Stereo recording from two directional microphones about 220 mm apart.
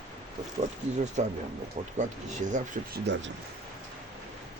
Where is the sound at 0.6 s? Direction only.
30° right (ahead or behind).